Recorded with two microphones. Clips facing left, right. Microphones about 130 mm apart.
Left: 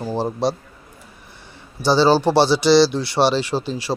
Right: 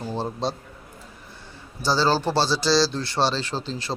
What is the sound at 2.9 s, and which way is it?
Speech, 15° left (ahead or behind).